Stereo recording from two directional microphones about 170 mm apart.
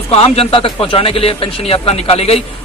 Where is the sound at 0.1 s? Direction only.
35° left (ahead or behind).